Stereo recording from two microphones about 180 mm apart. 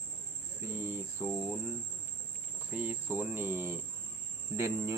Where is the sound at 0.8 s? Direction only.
15° right (ahead or behind).